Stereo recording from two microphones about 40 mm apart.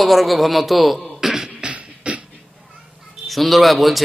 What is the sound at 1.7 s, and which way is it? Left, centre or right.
Beatboxing, right.